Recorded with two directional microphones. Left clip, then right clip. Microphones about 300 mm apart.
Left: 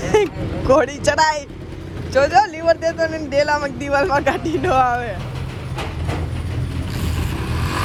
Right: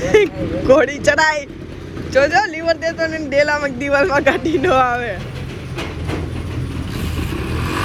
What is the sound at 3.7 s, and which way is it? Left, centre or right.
Speech, centre.